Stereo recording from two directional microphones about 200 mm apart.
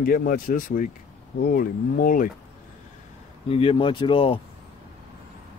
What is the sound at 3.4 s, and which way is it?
Speech, 30° left (ahead or behind).